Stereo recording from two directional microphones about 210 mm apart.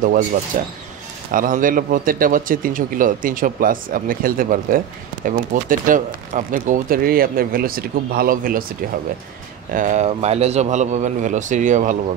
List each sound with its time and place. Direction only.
0.5 s speech: 40° right (ahead or behind)
9.8 s speech: 35° right (ahead or behind)